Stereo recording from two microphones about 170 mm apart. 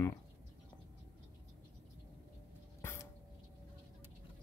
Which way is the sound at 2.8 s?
15° left (ahead or behind).